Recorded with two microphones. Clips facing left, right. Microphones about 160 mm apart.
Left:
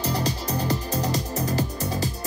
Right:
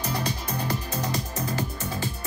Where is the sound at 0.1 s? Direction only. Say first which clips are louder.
Left 3 dB; 40° left (ahead or behind).